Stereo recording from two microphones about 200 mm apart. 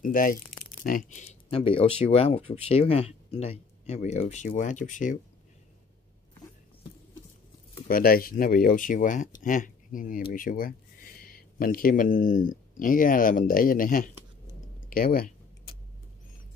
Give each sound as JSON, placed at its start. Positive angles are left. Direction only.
{"t": 0.0, "sound": "speech", "side_deg": 45}
{"t": 7.9, "sound": "speech", "side_deg": 45}